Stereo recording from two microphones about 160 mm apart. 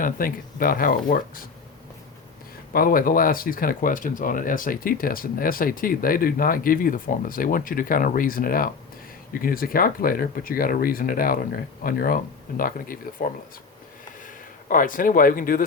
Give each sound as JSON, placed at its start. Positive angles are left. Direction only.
{"t": 0.0, "sound": "speech", "side_deg": 60}
{"t": 2.7, "sound": "speech", "side_deg": 65}
{"t": 14.7, "sound": "speech", "side_deg": 55}